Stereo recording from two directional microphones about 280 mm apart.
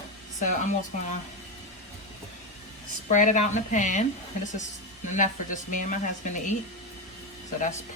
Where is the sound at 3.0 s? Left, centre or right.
Left.